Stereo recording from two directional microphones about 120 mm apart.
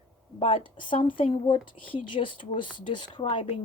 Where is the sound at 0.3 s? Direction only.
50° left (ahead or behind).